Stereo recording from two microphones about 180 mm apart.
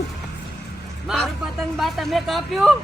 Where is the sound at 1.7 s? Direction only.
Centre (ahead or behind).